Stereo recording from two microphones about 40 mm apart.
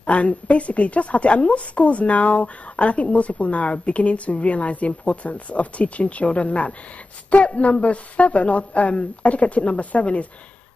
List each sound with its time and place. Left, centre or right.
0.0 s a woman's voice: left